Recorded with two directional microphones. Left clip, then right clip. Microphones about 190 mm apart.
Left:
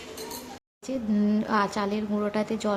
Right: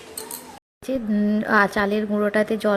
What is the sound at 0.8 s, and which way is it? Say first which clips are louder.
Speech: right 4 dB; 20° right (ahead or behind).